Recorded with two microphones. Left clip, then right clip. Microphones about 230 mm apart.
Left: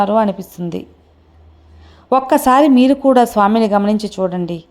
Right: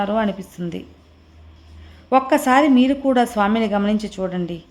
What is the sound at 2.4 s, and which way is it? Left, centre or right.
A woman's voice, centre.